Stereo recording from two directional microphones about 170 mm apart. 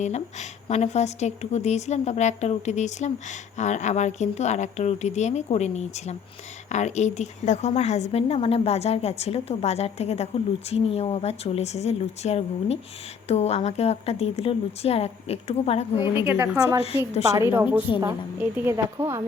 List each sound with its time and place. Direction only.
0.0 s speech: 40° left (ahead or behind)
16.1 s a woman's voice: 15° right (ahead or behind)